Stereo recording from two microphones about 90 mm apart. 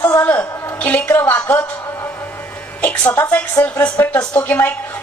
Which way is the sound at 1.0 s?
25° left (ahead or behind).